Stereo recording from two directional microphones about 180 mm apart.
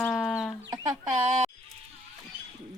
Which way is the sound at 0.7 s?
20° right (ahead or behind).